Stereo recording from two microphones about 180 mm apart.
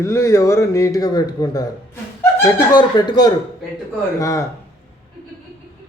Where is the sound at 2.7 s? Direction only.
25° left (ahead or behind).